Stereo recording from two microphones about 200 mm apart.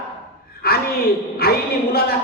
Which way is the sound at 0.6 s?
50° left (ahead or behind).